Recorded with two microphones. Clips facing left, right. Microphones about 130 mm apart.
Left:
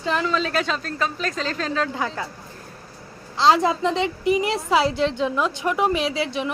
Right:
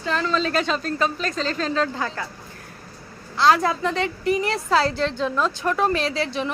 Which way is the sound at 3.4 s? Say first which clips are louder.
Left 1 dB; 20° left (ahead or behind).